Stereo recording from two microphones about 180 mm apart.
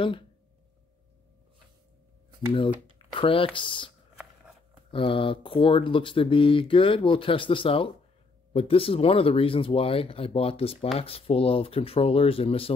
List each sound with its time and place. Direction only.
3.2 s speech: 30° left (ahead or behind)
4.9 s speech: 30° left (ahead or behind)